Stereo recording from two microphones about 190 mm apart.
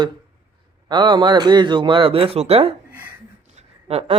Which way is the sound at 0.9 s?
25° right (ahead or behind).